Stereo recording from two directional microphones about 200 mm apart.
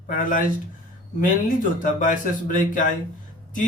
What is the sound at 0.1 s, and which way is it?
Speech, 40° left (ahead or behind).